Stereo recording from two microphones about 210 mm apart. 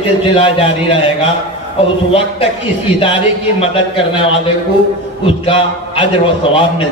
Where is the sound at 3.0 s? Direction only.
25° left (ahead or behind).